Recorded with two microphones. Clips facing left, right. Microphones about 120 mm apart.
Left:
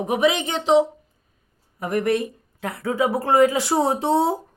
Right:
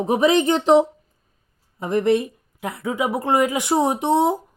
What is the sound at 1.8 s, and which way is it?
Speech, 25° right (ahead or behind).